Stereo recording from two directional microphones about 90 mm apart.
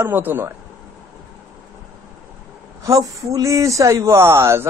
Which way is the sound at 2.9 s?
40° right (ahead or behind).